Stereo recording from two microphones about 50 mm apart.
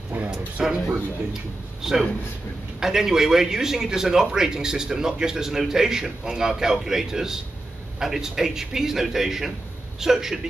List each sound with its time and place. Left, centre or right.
0.1 s speech: right
0.6 s a man's voice: centre
1.8 s a man's voice: centre